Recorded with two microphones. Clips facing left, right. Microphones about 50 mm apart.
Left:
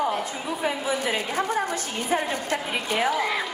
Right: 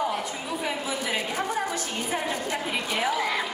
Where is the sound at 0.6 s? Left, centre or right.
Left.